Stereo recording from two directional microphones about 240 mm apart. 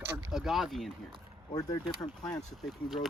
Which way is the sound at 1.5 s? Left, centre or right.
Centre.